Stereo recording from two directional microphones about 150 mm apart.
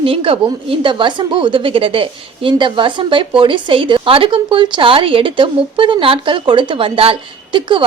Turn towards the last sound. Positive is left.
turn(degrees=-35)  # may be behind; listen again after turning